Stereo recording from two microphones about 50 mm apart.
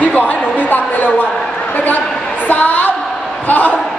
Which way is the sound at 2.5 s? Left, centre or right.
Left.